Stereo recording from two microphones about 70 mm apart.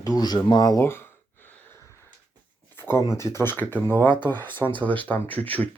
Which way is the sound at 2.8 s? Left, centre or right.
Left.